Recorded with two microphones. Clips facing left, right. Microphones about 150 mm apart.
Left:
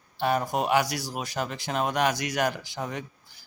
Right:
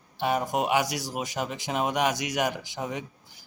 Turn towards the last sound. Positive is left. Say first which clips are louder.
# right 1 dB
turn(degrees=-15)  # may be behind; listen again after turning